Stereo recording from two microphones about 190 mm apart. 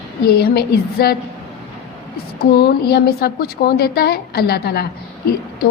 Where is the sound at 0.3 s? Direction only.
55° left (ahead or behind).